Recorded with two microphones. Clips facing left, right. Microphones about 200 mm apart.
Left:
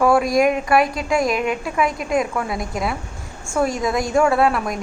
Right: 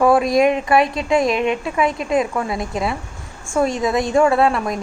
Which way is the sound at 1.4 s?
25° right (ahead or behind).